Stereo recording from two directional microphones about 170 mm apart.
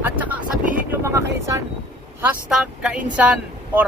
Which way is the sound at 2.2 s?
5° right (ahead or behind).